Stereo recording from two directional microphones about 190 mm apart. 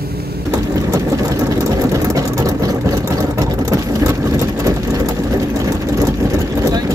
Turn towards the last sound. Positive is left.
turn(degrees=-15)  # may be behind; listen again after turning